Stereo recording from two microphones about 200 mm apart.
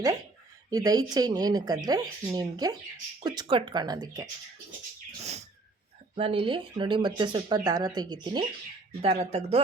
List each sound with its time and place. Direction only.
0.7 s speech: 20° right (ahead or behind)
6.1 s speech: 25° right (ahead or behind)